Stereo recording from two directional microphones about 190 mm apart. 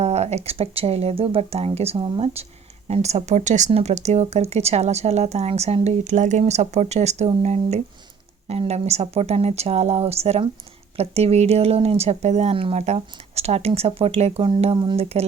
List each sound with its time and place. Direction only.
0.0 s speech: 35° right (ahead or behind)